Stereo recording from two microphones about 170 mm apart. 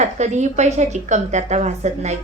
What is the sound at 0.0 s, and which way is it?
A woman's voice, 45° right (ahead or behind).